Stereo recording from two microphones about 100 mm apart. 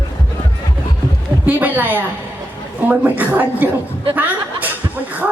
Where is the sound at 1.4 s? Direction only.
15° right (ahead or behind).